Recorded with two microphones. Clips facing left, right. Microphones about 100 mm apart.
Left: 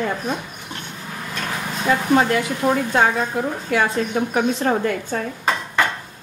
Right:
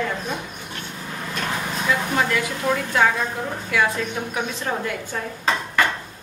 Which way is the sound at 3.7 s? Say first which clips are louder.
Left 2 dB; 40° left (ahead or behind).